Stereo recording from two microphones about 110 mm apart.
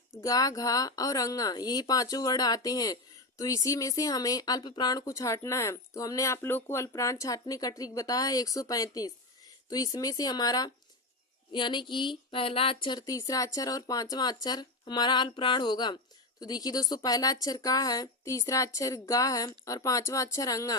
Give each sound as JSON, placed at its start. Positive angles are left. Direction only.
{"t": 0.2, "sound": "speech", "side_deg": 35}